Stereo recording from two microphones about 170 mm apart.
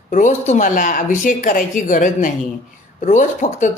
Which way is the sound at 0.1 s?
45° left (ahead or behind).